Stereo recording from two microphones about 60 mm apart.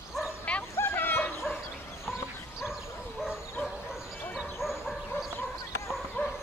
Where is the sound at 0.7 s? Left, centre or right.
Left.